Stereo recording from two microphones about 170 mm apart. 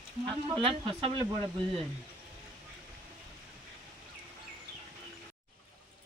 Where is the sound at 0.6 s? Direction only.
30° right (ahead or behind).